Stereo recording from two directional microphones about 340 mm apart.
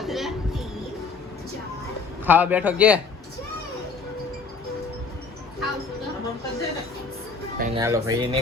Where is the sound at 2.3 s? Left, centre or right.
Centre.